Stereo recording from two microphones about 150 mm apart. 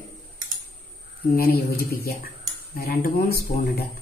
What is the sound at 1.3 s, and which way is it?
Speech, 90° left.